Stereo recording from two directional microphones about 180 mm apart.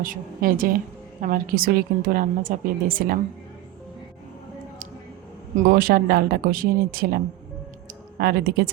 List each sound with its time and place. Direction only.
0.0 s a woman's voice: 50° right (ahead or behind)
5.5 s speech: 55° right (ahead or behind)
8.2 s speech: 60° right (ahead or behind)